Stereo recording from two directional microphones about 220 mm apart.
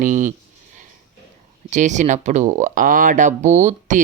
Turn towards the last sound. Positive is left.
turn(degrees=-35)  # may be behind; listen again after turning